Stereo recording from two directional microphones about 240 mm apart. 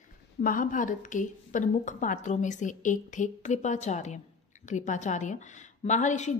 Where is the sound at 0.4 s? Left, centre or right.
Left.